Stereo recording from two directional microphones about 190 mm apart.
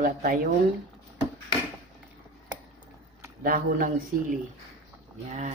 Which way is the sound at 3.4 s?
50° right (ahead or behind).